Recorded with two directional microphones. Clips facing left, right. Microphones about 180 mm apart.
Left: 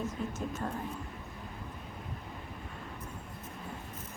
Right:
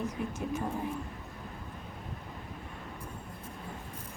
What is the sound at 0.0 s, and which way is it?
Speech, 15° right (ahead or behind).